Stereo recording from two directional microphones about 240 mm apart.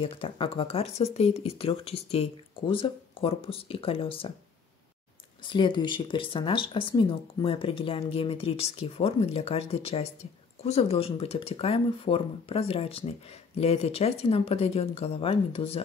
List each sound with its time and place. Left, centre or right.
0.0 s speech: left
5.4 s speech: centre